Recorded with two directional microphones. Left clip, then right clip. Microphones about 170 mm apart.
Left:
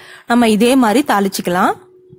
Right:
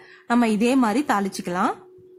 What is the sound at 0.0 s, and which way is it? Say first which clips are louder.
A woman's voice: left 8 dB; 35° left (ahead or behind).